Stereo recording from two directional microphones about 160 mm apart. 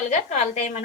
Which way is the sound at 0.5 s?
45° left (ahead or behind).